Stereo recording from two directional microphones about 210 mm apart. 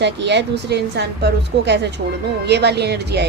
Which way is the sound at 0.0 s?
55° right (ahead or behind).